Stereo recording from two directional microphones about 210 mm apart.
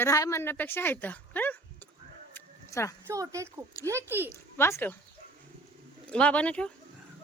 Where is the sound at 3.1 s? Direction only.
15° right (ahead or behind).